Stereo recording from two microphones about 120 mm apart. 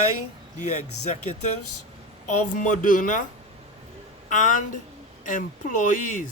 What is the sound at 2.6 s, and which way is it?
Speech, 90° left.